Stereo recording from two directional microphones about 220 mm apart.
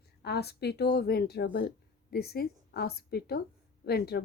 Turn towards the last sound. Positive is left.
turn(degrees=45)  # may be behind; listen again after turning